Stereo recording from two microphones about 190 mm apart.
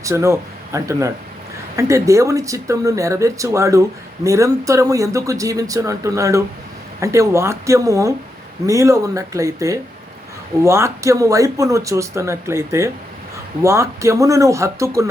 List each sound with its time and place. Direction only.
0.0 s speech: 15° right (ahead or behind)